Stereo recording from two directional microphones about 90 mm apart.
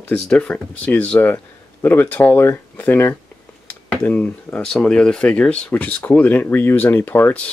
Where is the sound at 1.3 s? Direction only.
25° left (ahead or behind).